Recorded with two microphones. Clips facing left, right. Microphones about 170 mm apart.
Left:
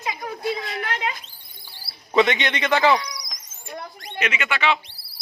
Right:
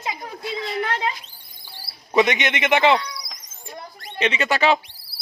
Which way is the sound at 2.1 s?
20° right (ahead or behind).